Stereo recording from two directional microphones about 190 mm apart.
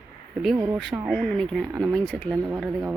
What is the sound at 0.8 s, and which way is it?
Speech, centre (ahead or behind).